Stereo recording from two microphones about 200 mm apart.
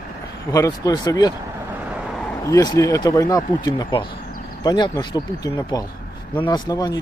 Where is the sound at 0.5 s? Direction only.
15° left (ahead or behind).